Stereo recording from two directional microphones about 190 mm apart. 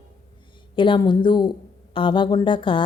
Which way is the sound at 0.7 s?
25° left (ahead or behind).